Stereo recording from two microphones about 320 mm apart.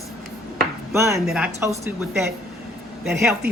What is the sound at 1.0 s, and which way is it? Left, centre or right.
A woman's voice, centre.